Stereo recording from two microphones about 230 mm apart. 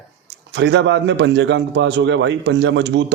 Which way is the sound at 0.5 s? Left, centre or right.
Right.